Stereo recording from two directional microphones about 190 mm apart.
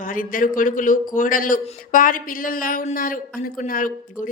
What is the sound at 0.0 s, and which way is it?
A woman's voice, 45° left (ahead or behind).